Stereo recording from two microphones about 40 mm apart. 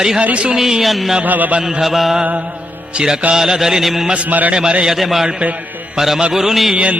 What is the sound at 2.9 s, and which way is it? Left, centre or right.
Mantra, centre.